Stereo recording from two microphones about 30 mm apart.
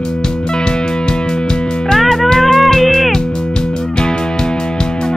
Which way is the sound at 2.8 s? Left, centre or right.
Centre.